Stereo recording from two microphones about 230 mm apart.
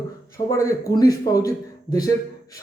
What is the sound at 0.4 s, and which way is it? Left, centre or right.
Speech, centre.